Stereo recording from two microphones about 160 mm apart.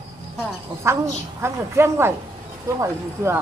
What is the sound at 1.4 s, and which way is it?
Speech, 15° right (ahead or behind).